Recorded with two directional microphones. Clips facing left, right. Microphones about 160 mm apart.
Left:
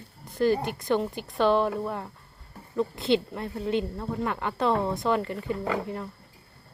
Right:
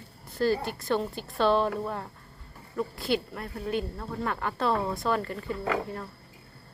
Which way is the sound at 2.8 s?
20° left (ahead or behind).